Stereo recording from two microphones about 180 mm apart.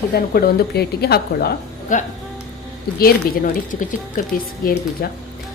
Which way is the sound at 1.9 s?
45° left (ahead or behind).